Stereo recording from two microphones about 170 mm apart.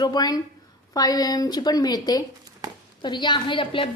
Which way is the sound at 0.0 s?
25° left (ahead or behind).